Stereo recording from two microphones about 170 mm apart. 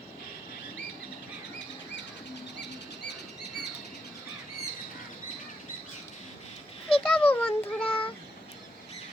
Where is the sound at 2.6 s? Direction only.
90° left.